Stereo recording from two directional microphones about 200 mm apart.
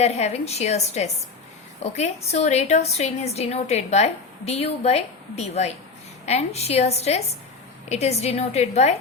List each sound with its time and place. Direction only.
0.0 s a woman's voice: 35° left (ahead or behind)